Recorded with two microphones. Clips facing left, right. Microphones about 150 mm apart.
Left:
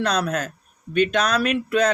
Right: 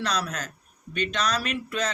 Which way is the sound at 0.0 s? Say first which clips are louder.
Left 7 dB; 55° left (ahead or behind).